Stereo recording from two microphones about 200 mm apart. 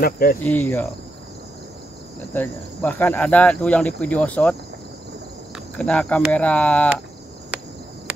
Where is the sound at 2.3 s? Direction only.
10° left (ahead or behind).